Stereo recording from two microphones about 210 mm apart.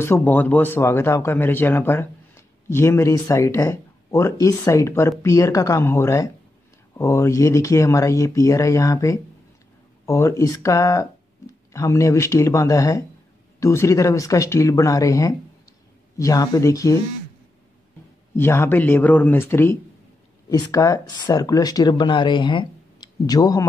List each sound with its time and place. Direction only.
0.0 s speech: 10° left (ahead or behind)
18.3 s speech: 10° left (ahead or behind)